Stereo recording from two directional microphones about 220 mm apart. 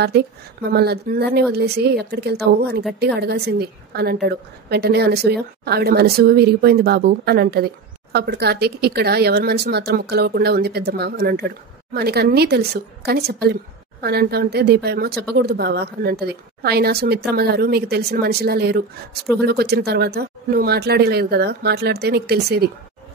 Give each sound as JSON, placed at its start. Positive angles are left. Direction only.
{"t": 0.1, "sound": "a woman's voice", "side_deg": -50}